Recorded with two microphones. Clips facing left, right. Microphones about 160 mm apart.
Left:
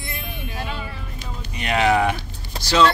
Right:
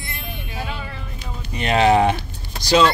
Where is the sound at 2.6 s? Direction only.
15° right (ahead or behind).